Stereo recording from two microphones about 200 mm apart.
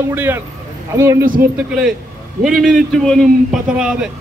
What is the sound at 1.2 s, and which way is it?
Speech, 45° right (ahead or behind).